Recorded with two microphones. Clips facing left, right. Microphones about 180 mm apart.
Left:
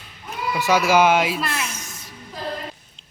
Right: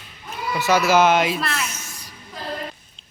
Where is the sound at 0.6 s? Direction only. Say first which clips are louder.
Even; 10° left (ahead or behind).